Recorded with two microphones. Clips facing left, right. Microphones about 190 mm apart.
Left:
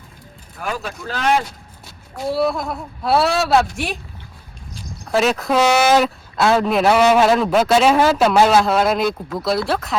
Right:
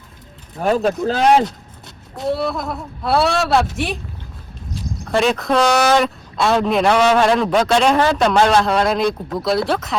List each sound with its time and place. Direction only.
0.6 s speech: 35° right (ahead or behind)
2.2 s speech: centre (ahead or behind)